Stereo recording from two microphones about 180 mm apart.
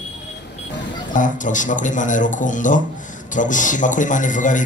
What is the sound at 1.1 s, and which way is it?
A man's voice, 45° left (ahead or behind).